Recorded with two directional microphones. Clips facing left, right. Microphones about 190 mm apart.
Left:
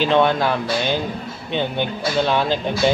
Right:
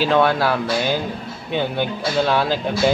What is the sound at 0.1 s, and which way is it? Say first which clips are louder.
Speech: even; 20° left (ahead or behind).